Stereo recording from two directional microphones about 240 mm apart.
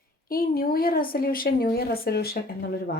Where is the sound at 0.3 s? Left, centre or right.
Left.